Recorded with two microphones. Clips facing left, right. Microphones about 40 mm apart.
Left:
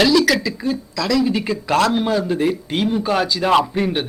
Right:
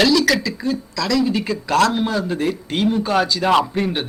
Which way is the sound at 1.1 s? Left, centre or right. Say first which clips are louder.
Left 1 dB; centre.